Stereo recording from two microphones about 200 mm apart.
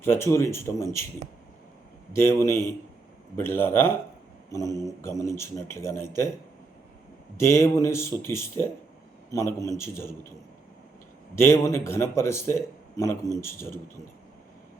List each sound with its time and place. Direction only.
0.0 s a man's voice: 10° left (ahead or behind)
2.1 s a man's voice: 15° left (ahead or behind)
7.3 s a man's voice: 15° left (ahead or behind)
11.3 s a man's voice: 15° left (ahead or behind)